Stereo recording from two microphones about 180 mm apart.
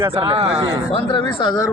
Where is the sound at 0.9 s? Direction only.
25° left (ahead or behind).